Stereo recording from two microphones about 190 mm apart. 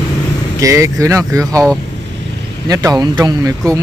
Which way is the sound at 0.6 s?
15° right (ahead or behind).